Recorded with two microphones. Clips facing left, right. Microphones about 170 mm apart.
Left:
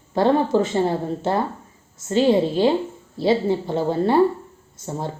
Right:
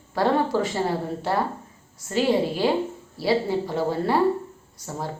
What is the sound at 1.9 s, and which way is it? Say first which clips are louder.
A woman's voice: left 4 dB; 25° left (ahead or behind).